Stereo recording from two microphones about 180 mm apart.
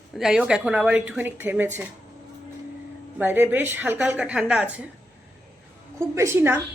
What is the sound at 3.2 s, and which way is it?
A woman's voice, 10° right (ahead or behind).